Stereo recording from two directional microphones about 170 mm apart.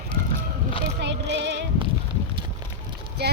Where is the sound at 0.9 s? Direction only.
90° right.